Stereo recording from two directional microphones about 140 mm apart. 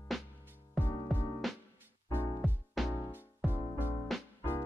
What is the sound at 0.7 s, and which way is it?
Music, 15° left (ahead or behind).